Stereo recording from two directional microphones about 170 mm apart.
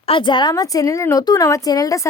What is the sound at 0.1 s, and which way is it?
Speech, 30° left (ahead or behind).